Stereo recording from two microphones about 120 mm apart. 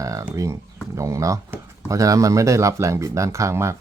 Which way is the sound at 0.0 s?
25° right (ahead or behind).